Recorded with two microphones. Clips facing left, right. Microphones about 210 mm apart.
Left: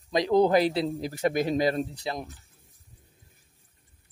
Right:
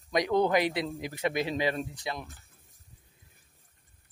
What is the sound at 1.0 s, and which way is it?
Speech, 45° left (ahead or behind).